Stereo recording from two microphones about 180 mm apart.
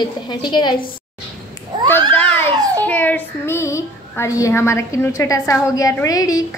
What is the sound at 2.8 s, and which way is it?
Child singing, 10° left (ahead or behind).